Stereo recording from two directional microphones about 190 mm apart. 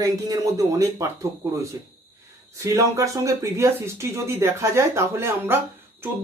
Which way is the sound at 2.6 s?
15° right (ahead or behind).